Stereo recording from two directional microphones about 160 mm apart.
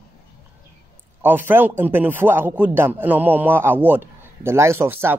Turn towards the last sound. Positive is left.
turn(degrees=-15)  # may be behind; listen again after turning